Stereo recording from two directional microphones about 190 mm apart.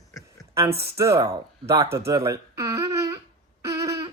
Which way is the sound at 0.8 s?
15° right (ahead or behind).